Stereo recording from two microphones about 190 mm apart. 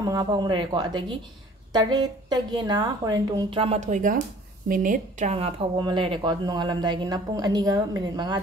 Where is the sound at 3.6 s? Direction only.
35° right (ahead or behind).